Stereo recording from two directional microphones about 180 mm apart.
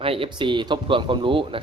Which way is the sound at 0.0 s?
30° right (ahead or behind).